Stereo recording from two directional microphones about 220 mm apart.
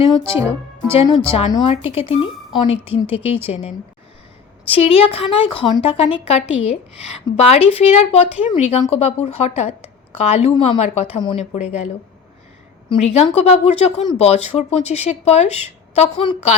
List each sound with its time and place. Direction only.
0.3 s speech: 10° right (ahead or behind)
1.3 s a woman's voice: 25° left (ahead or behind)
12.9 s a woman's voice: 25° left (ahead or behind)